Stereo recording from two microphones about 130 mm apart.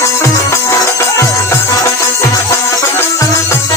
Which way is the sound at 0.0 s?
20° left (ahead or behind).